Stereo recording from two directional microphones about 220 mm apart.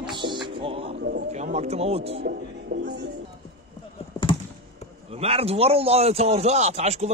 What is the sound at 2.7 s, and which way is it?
Music, 35° right (ahead or behind).